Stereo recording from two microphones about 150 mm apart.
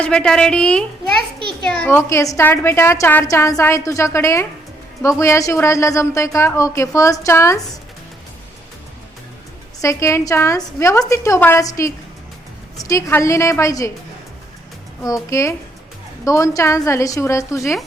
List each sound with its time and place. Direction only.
0.0 s a woman's voice: 5° left (ahead or behind)
2.0 s a woman's voice: 20° left (ahead or behind)
9.8 s a woman's voice: 20° left (ahead or behind)
15.0 s a woman's voice: 20° left (ahead or behind)